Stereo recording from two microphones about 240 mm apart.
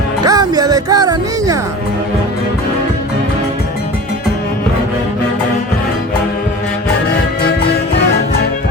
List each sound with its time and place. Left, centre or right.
0.3 s music: centre